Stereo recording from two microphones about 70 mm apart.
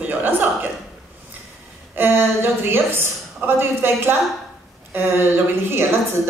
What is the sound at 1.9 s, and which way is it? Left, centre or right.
A woman's voice, right.